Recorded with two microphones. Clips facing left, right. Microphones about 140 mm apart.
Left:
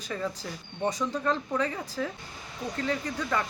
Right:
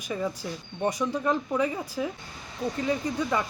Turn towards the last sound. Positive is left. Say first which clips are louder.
# right 3 dB
turn(degrees=-15)  # may be behind; listen again after turning